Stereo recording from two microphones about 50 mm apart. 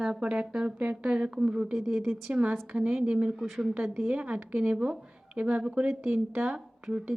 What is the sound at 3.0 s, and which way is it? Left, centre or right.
Speech, right.